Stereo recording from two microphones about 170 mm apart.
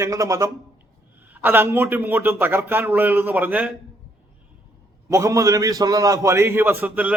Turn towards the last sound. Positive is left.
turn(degrees=-10)  # may be behind; listen again after turning